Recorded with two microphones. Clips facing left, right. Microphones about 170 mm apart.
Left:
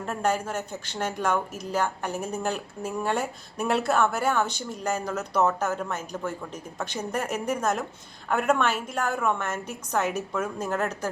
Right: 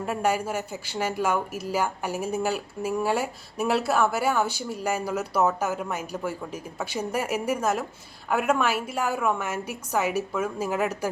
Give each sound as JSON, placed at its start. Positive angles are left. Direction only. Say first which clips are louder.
{"t": 0.0, "sound": "speech", "louder": "right 1 dB", "side_deg": -10}